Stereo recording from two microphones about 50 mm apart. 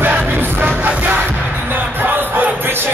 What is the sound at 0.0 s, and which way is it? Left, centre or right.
Music, right.